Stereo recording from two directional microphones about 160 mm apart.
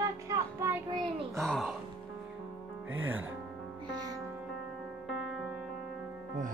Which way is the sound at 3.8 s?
25° right (ahead or behind).